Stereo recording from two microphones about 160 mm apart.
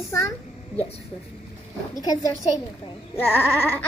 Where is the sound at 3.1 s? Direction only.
15° left (ahead or behind).